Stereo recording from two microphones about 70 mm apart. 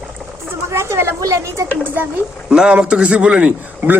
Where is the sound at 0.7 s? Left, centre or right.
Right.